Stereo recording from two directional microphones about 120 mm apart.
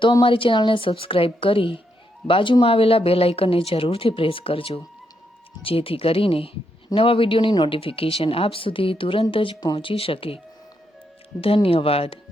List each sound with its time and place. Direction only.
0.0 s speech: 45° left (ahead or behind)